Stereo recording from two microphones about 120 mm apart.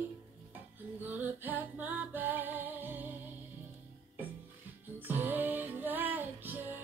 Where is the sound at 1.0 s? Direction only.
15° right (ahead or behind).